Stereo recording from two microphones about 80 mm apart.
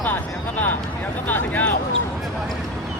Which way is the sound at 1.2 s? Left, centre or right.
Left.